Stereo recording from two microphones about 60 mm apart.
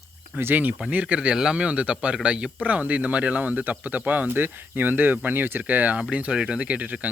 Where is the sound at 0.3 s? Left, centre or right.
Right.